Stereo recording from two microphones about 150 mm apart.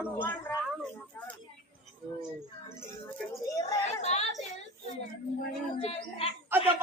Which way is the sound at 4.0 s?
45° left (ahead or behind).